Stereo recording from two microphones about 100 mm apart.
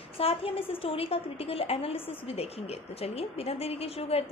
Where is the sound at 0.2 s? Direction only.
75° left (ahead or behind).